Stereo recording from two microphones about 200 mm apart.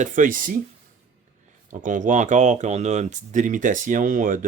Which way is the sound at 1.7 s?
40° right (ahead or behind).